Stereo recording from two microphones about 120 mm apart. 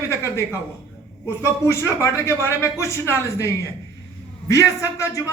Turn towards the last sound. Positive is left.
turn(degrees=25)  # may be behind; listen again after turning